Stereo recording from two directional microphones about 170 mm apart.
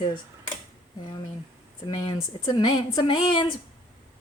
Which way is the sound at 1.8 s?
25° left (ahead or behind).